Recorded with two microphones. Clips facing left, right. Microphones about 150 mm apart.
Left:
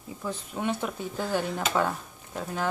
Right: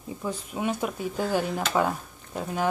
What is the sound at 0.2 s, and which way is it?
Speech, 10° right (ahead or behind).